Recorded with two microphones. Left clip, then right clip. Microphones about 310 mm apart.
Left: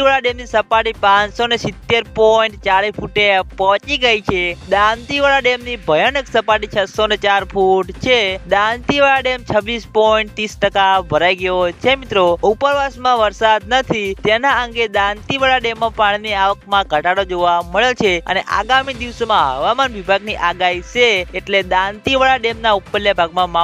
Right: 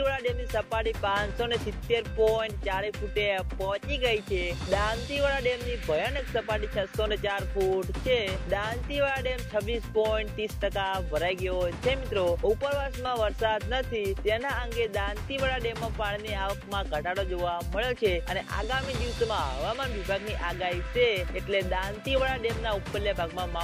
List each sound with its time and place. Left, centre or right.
0.0 s speech: left